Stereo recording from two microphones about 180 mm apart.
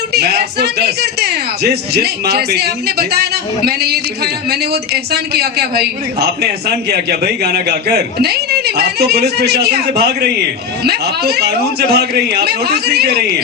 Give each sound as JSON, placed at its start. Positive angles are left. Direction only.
{"t": 0.1, "sound": "a man's voice", "side_deg": -65}